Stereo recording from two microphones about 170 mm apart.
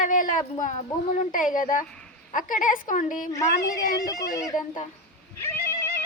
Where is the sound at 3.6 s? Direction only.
20° left (ahead or behind).